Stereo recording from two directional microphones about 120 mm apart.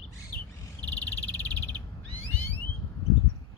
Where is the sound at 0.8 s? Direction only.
10° left (ahead or behind).